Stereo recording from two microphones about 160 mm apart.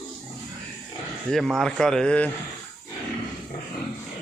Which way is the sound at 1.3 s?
Centre (ahead or behind).